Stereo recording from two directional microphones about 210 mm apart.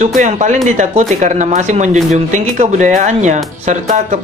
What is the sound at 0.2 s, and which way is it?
Speech, 35° right (ahead or behind).